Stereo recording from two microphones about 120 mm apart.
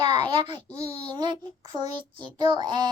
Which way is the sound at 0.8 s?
55° left (ahead or behind).